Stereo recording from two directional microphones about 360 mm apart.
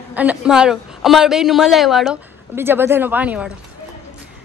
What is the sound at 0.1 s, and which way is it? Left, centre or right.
Speech, centre.